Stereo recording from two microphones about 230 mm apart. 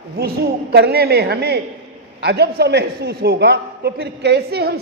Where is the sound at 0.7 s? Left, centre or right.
Right.